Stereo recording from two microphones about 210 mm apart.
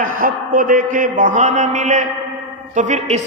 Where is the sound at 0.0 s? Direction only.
40° right (ahead or behind).